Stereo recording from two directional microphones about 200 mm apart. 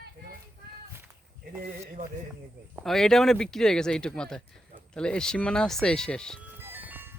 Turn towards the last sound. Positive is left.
turn(degrees=-10)  # may be behind; listen again after turning